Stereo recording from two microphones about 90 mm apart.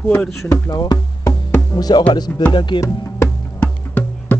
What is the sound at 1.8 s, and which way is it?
Speech, 50° left (ahead or behind).